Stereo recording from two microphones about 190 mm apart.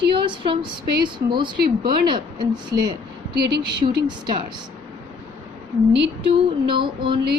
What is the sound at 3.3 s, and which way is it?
Speech, 60° right (ahead or behind).